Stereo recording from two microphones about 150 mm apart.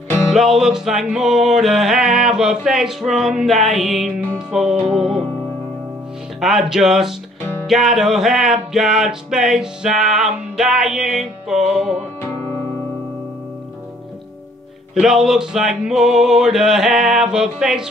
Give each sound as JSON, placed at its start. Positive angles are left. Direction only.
{"t": 0.3, "sound": "music", "side_deg": 0}
{"t": 6.4, "sound": "music", "side_deg": 0}
{"t": 15.0, "sound": "music", "side_deg": -5}